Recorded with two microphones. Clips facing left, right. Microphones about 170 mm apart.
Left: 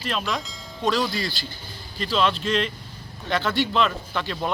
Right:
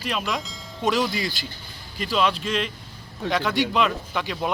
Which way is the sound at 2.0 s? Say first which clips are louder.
Even; 10° right (ahead or behind).